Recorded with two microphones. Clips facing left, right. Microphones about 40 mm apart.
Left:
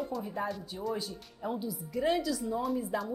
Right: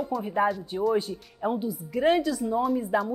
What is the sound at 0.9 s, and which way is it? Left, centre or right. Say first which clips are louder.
Speech: right 8 dB; right.